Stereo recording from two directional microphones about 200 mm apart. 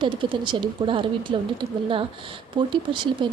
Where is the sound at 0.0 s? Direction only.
25° right (ahead or behind).